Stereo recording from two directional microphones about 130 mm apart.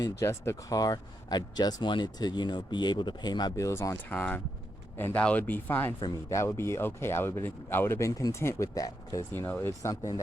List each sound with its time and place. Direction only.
0.0 s speech: 20° left (ahead or behind)